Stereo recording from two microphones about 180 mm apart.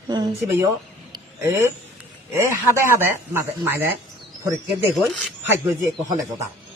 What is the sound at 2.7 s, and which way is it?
Speech, 15° right (ahead or behind).